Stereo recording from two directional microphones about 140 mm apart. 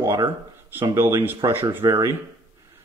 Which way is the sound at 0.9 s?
20° right (ahead or behind).